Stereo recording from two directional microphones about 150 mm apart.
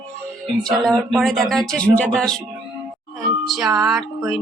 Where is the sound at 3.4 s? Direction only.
Centre (ahead or behind).